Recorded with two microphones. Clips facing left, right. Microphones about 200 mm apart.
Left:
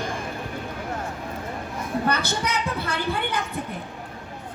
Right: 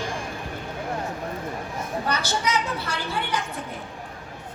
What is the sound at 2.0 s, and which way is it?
Speech, 55° left (ahead or behind).